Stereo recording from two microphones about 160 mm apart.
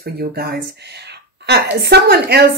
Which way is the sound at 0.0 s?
75° right (ahead or behind).